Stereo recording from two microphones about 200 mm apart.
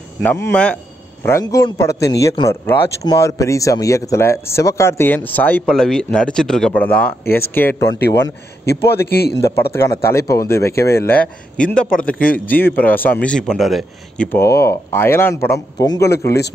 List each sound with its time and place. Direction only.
0.2 s a man's voice: 10° left (ahead or behind)
7.9 s a man's voice: 60° left (ahead or behind)
9.8 s a man's voice: 15° left (ahead or behind)
12.1 s a man's voice: 45° left (ahead or behind)
12.4 s a man's voice: 10° left (ahead or behind)